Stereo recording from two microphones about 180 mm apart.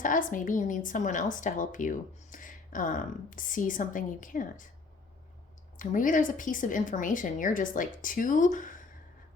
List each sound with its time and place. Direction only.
0.0 s a woman's voice: 45° left (ahead or behind)
5.7 s a woman's voice: 50° left (ahead or behind)